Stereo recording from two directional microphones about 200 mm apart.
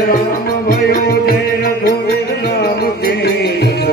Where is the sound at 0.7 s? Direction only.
50° left (ahead or behind).